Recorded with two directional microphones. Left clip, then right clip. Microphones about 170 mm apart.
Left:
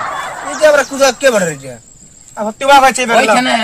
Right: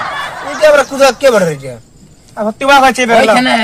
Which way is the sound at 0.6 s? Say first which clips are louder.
Right 2 dB; 20° right (ahead or behind).